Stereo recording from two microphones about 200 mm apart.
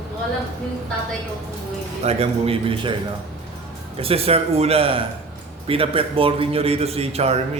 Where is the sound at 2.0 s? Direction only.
30° right (ahead or behind).